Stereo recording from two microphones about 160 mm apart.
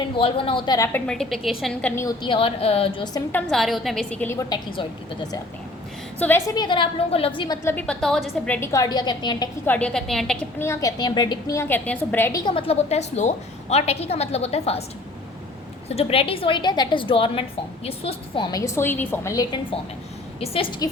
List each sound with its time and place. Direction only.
0.2 s a woman's voice: 35° left (ahead or behind)
0.9 s a woman's voice: 5° left (ahead or behind)
2.0 s a woman's voice: 25° left (ahead or behind)
3.3 s a woman's voice: centre (ahead or behind); by 4.9 s 25° left (ahead or behind)
6.1 s a woman's voice: 15° left (ahead or behind)
8.7 s a woman's voice: 25° left (ahead or behind)
9.6 s a woman's voice: 10° left (ahead or behind)
10.6 s a woman's voice: 20° left (ahead or behind)
12.5 s a woman's voice: 35° left (ahead or behind)
16.0 s a woman's voice: 35° left (ahead or behind); by 19.5 s 20° left (ahead or behind)
20.4 s a woman's voice: 35° left (ahead or behind)